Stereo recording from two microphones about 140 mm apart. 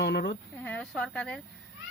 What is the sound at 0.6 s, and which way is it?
Speech, 10° left (ahead or behind).